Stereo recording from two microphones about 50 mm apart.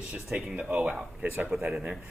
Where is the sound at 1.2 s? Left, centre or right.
Right.